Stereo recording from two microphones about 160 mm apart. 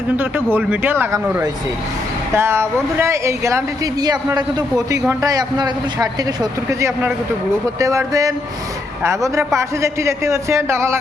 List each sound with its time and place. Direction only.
0.5 s speech: 10° right (ahead or behind)